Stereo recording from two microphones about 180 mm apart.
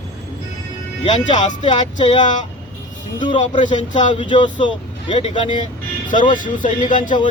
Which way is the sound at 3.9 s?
25° left (ahead or behind).